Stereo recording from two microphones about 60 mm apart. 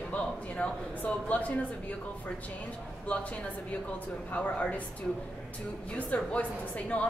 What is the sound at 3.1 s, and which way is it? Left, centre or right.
Speech, left.